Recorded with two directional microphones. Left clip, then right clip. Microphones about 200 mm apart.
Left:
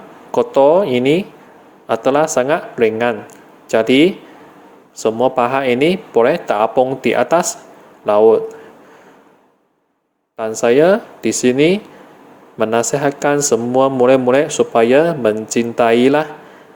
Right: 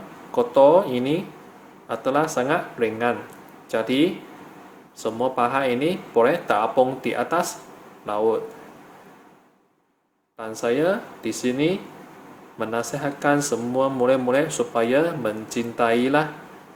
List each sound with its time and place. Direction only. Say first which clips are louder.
0.3 s speech: left 4 dB; 35° left (ahead or behind)
10.3 s speech: left 11 dB; 35° left (ahead or behind)